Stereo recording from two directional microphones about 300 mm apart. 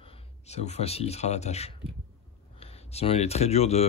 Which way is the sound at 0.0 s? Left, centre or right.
Left.